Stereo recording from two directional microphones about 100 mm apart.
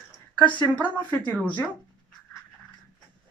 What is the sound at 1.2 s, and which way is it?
Speech, 15° left (ahead or behind).